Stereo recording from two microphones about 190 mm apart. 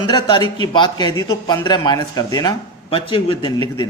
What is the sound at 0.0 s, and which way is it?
A man's voice, 25° left (ahead or behind).